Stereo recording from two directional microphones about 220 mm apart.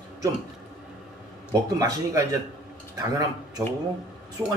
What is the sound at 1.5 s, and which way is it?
Speech, 15° right (ahead or behind).